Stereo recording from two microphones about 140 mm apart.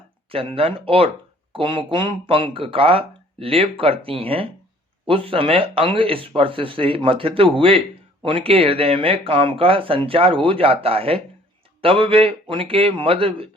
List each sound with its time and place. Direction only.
0.3 s speech: 40° right (ahead or behind)